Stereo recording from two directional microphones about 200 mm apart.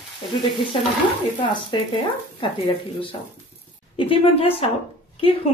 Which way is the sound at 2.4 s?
25° left (ahead or behind).